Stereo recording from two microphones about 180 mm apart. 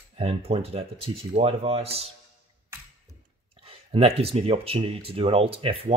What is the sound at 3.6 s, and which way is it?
Speech, 35° right (ahead or behind).